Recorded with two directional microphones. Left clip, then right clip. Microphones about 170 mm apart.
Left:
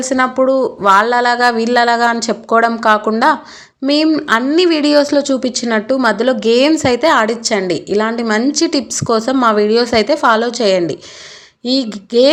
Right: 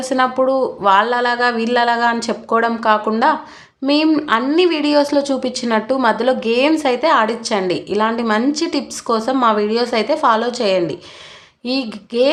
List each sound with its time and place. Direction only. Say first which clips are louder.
0.0 s a woman's voice: left 2 dB; 20° left (ahead or behind)